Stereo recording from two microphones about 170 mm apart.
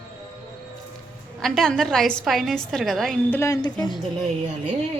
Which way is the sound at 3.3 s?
15° left (ahead or behind).